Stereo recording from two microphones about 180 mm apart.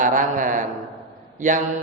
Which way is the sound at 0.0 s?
45° right (ahead or behind).